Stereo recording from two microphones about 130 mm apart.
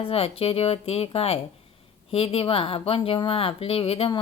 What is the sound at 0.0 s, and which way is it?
Speech, 45° left (ahead or behind).